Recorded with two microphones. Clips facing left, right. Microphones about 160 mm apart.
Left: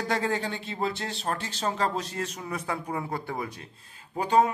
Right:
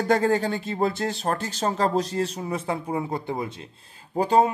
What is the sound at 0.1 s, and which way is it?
Speech, 45° right (ahead or behind).